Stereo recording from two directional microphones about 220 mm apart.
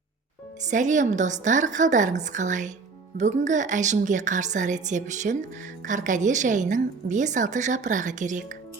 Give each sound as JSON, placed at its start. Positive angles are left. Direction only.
{"t": 0.7, "sound": "a woman's voice", "side_deg": -35}